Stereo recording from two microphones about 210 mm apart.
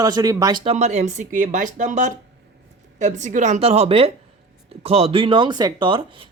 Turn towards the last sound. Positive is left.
turn(degrees=-20)  # may be behind; listen again after turning